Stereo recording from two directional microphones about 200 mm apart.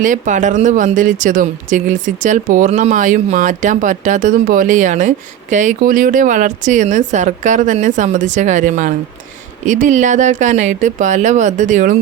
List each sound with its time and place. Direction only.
0.0 s speech: 40° right (ahead or behind)